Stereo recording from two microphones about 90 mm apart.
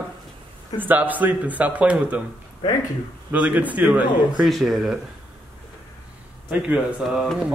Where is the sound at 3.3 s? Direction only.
15° right (ahead or behind).